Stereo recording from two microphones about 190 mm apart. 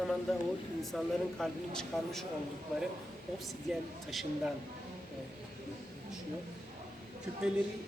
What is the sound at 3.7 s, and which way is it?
Speech, 5° right (ahead or behind).